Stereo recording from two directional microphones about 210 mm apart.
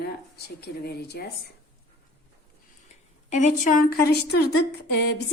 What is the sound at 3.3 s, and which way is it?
A woman's voice, 35° left (ahead or behind).